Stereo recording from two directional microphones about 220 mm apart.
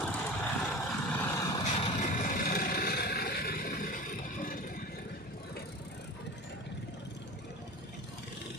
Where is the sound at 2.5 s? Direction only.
40° left (ahead or behind).